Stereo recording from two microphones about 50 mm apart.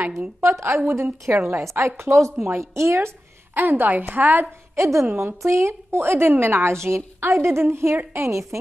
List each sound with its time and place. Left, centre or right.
0.4 s a woman's voice: right
0.7 s a woman's voice: right
3.5 s a woman's voice: right
4.7 s a woman's voice: right
5.1 s a woman's voice: right
8.2 s a woman's voice: right